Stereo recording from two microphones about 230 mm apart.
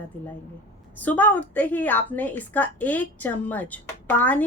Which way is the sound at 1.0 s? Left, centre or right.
Centre.